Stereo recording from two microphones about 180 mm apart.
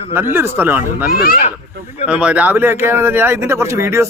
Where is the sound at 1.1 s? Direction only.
55° left (ahead or behind).